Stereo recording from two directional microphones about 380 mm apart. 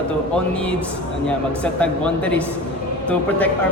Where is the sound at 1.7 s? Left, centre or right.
Centre.